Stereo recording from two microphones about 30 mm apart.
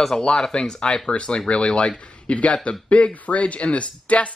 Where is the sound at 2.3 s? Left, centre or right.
Left.